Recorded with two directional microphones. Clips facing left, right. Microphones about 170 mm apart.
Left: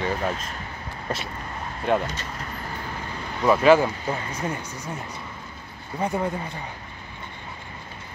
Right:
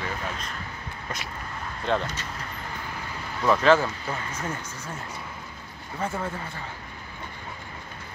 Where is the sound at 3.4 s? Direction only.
10° left (ahead or behind).